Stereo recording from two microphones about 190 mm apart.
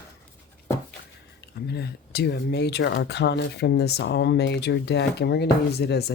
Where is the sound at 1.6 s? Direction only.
60° left (ahead or behind).